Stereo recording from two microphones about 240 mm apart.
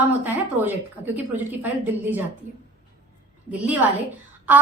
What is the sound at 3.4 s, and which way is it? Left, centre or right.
Speech, centre.